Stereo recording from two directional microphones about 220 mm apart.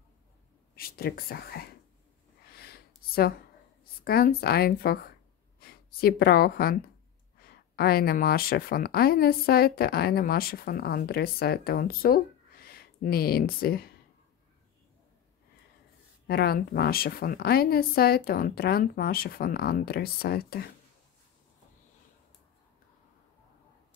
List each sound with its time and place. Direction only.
0.7 s speech: 45° left (ahead or behind)
2.4 s snort: 45° left (ahead or behind)
4.0 s speech: 45° left (ahead or behind)
16.3 s speech: 45° left (ahead or behind)